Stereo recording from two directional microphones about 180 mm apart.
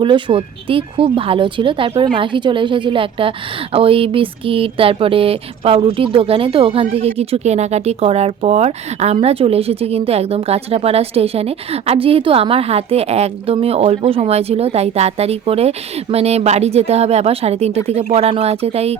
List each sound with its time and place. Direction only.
0.0 s speech: 25° right (ahead or behind)